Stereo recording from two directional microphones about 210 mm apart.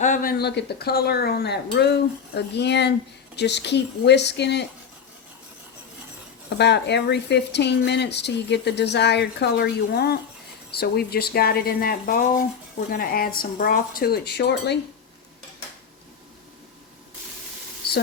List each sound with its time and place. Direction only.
0.0 s speech: 40° left (ahead or behind); by 4.6 s 55° left (ahead or behind)
6.6 s speech: 55° left (ahead or behind)